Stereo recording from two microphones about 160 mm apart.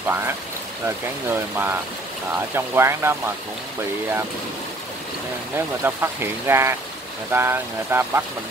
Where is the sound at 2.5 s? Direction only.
15° right (ahead or behind).